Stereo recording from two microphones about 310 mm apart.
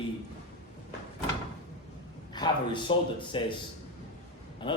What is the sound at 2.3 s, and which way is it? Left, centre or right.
A man's voice, centre.